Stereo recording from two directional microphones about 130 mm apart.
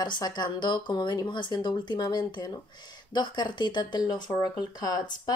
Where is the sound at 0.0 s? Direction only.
35° left (ahead or behind).